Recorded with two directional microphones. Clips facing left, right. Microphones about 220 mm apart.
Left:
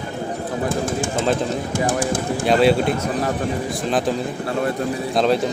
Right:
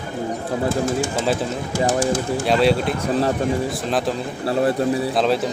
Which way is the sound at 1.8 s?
55° left (ahead or behind).